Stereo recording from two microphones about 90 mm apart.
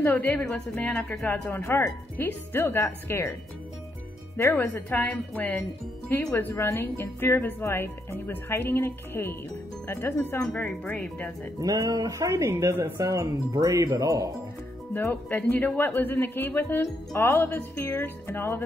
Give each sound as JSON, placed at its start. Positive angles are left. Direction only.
{"t": 0.0, "sound": "speech", "side_deg": 20}
{"t": 4.4, "sound": "speech", "side_deg": 25}
{"t": 11.6, "sound": "speech", "side_deg": -45}
{"t": 15.0, "sound": "speech", "side_deg": 25}